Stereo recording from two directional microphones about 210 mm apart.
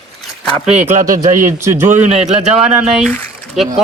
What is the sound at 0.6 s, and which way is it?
A man's voice, 35° right (ahead or behind).